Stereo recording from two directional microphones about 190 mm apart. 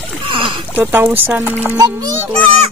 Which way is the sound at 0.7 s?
10° right (ahead or behind).